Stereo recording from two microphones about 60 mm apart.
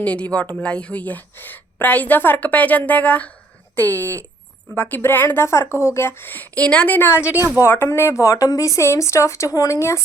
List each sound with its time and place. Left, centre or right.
0.0 s a woman's voice: left
5.5 s a woman's voice: left; by 6.9 s centre
6.9 s a woman's voice: left
7.3 s speech: right
7.9 s a woman's voice: left
8.8 s a woman's voice: left